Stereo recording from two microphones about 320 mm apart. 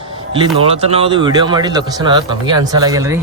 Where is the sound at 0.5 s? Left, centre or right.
Centre.